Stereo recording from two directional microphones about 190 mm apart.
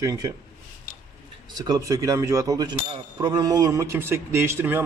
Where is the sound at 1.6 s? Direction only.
20° right (ahead or behind).